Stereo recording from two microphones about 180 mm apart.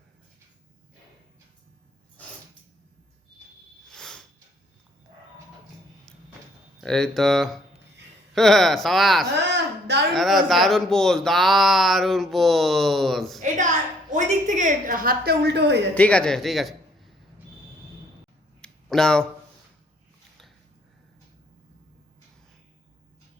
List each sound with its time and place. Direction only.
3.8 s cricket: 5° left (ahead or behind)
6.8 s speech: 5° left (ahead or behind)
9.5 s a sound: 70° right (ahead or behind)
10.1 s speech: centre (ahead or behind)
14.1 s a woman's voice: 45° right (ahead or behind); by 15.9 s 70° right (ahead or behind)
16.0 s a man's voice: 5° left (ahead or behind)
18.6 s a sound: 5° left (ahead or behind)